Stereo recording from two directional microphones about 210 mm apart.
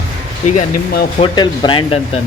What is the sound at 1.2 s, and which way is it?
Speech, 20° left (ahead or behind).